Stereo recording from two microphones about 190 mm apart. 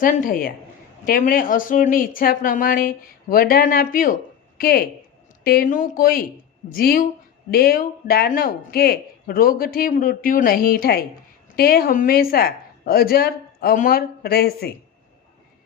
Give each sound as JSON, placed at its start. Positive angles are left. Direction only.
{"t": 0.0, "sound": "speech", "side_deg": 45}